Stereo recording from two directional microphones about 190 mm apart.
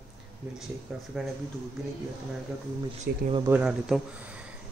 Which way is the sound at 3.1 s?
55° right (ahead or behind).